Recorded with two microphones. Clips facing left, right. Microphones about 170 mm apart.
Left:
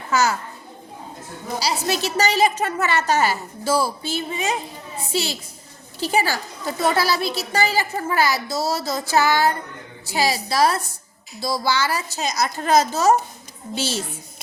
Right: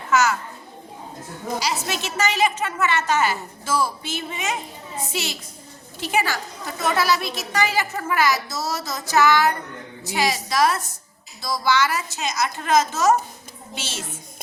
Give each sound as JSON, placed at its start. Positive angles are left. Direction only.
{"t": 0.1, "sound": "a child's voice", "side_deg": 35}
{"t": 1.5, "sound": "a woman's voice", "side_deg": 35}